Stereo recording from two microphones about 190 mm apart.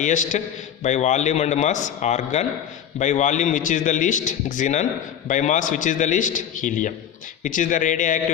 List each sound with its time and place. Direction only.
0.0 s a man's voice: 40° left (ahead or behind)